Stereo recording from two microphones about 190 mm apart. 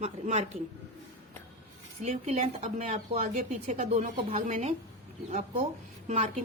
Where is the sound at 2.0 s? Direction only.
35° right (ahead or behind).